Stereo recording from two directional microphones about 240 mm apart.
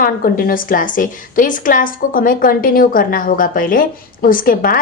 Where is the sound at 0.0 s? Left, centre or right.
Left.